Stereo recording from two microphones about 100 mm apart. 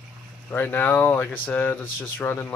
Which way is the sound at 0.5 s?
20° left (ahead or behind).